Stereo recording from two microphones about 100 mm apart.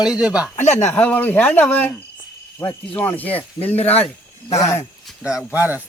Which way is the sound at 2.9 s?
20° left (ahead or behind).